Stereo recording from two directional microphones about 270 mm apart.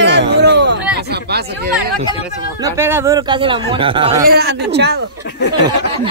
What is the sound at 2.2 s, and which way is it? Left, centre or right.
Speech, centre.